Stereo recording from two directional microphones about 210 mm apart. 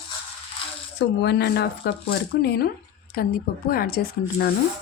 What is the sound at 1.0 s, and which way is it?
Speech, 55° left (ahead or behind).